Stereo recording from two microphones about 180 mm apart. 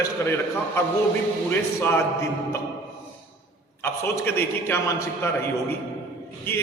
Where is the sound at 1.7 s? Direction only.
15° left (ahead or behind).